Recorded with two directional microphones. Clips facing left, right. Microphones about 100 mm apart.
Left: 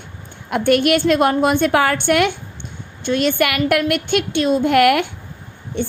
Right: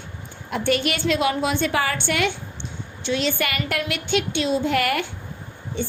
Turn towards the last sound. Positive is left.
turn(degrees=60)  # may be behind; listen again after turning